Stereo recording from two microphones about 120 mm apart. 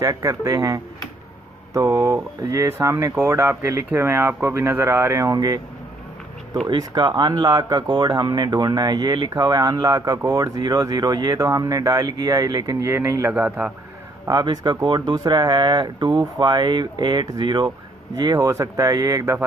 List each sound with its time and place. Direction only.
0.0 s speech: 30° right (ahead or behind)
6.7 s speech: 35° right (ahead or behind)
13.3 s a man's voice: 15° right (ahead or behind)
14.2 s speech: 35° right (ahead or behind)